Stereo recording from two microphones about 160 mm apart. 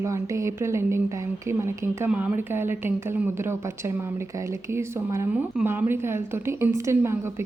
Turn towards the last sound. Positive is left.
turn(degrees=-15)  # may be behind; listen again after turning